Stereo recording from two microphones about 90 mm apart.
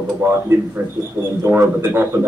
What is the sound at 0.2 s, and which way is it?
A man's voice, 25° right (ahead or behind).